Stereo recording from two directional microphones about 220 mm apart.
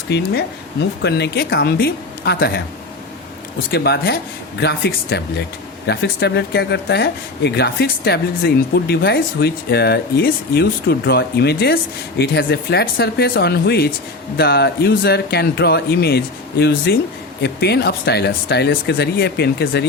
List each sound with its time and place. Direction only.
0.1 s speech: 50° left (ahead or behind)
3.7 s speech: 50° left (ahead or behind)